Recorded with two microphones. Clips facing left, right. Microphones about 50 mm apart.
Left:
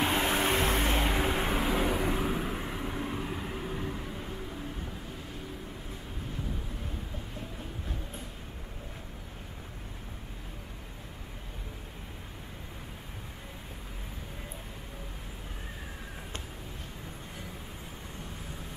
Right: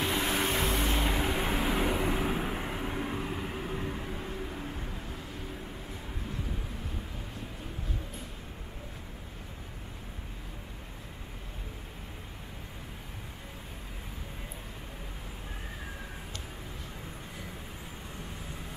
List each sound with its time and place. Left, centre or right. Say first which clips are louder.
0.0 s vehicle: left 2 dB; centre
1.0 s vehicle: left 1 dB; centre